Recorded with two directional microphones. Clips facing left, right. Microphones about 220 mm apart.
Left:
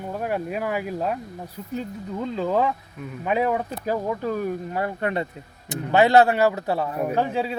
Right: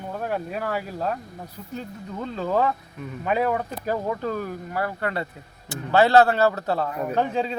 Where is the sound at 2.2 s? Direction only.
10° left (ahead or behind).